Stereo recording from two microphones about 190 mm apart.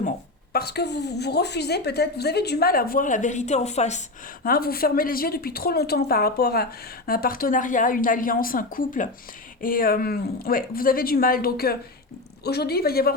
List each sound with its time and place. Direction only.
0.5 s a woman's voice: 60° left (ahead or behind); by 4.0 s 35° left (ahead or behind)
4.4 s a woman's voice: 50° left (ahead or behind)